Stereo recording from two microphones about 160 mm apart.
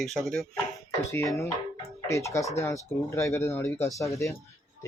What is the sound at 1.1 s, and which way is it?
Speech, 20° left (ahead or behind).